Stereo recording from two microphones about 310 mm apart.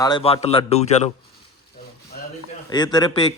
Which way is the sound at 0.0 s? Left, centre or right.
Centre.